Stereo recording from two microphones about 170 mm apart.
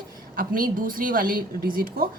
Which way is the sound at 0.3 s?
55° right (ahead or behind).